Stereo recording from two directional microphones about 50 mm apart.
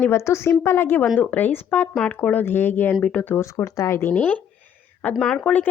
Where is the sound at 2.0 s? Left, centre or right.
Left.